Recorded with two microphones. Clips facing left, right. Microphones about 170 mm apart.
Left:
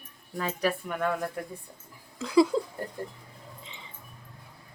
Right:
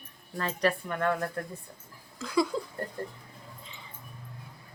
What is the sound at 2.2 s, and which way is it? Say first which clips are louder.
Speech: left 6 dB; 25° left (ahead or behind).